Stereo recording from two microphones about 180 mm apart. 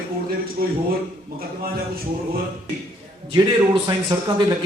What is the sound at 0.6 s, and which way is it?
Speech, 60° right (ahead or behind).